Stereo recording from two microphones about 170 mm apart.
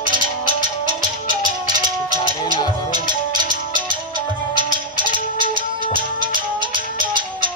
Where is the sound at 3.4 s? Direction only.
25° right (ahead or behind).